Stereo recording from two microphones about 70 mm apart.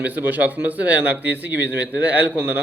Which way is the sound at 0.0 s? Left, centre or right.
Right.